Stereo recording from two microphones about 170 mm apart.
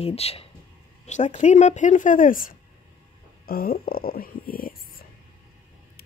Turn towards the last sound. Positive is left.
turn(degrees=55)  # may be behind; listen again after turning